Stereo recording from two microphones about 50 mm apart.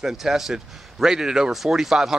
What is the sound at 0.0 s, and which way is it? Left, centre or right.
A man's voice, centre.